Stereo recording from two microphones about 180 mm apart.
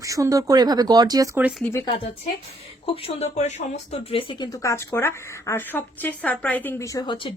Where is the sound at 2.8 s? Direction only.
30° left (ahead or behind).